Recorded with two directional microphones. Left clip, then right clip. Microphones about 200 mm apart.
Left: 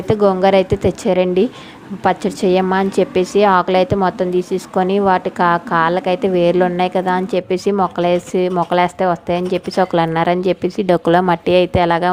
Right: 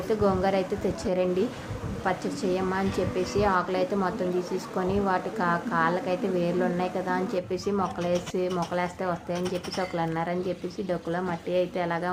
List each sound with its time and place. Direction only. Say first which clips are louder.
0.1 s a woman's voice: left 12 dB; 40° left (ahead or behind)